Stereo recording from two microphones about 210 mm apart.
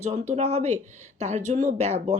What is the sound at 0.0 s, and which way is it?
A woman's voice, 35° right (ahead or behind).